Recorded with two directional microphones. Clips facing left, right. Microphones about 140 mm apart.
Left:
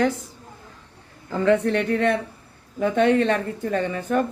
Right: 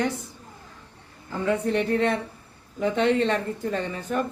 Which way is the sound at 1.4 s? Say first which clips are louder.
Left 4 dB; 85° left.